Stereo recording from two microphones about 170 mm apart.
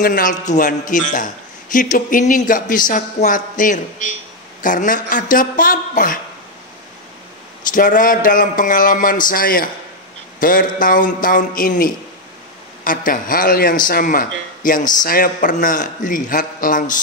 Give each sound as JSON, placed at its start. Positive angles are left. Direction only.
{"t": 0.0, "sound": "a man's voice", "side_deg": 55}
{"t": 7.6, "sound": "a man's voice", "side_deg": 50}